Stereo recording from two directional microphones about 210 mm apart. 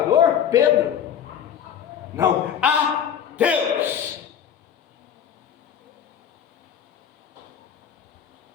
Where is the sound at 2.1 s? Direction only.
5° right (ahead or behind).